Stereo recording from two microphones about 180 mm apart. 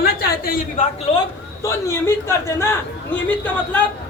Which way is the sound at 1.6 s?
15° left (ahead or behind).